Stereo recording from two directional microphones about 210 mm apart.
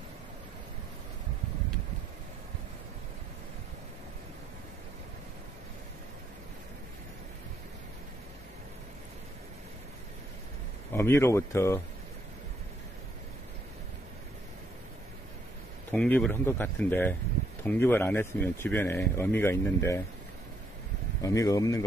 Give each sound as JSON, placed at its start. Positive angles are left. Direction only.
{"t": 10.9, "sound": "speech", "side_deg": 10}
{"t": 15.9, "sound": "speech", "side_deg": 5}
{"t": 21.2, "sound": "speech", "side_deg": 15}